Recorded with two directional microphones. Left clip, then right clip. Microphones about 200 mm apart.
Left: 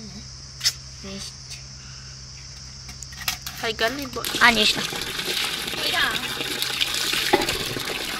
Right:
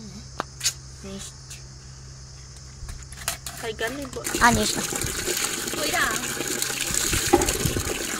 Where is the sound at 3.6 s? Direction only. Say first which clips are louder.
Left 6 dB; 10° left (ahead or behind).